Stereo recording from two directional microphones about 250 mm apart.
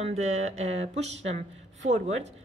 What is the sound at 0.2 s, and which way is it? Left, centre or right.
Speech, right.